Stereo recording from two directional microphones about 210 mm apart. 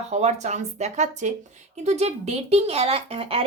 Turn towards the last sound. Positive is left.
turn(degrees=-25)  # may be behind; listen again after turning